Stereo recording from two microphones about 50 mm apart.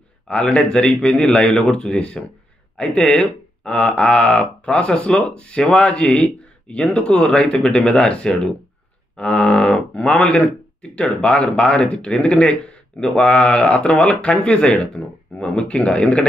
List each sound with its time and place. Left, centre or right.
0.3 s speech: centre